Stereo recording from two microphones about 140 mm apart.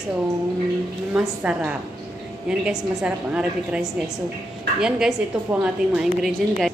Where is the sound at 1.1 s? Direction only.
10° right (ahead or behind).